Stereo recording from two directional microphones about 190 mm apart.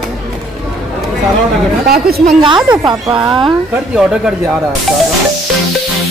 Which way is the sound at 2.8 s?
20° right (ahead or behind).